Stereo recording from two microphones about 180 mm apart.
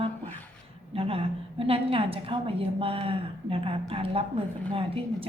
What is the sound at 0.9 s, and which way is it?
A woman's voice, 30° right (ahead or behind).